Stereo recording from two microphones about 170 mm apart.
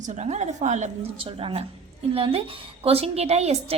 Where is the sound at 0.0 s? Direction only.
45° right (ahead or behind).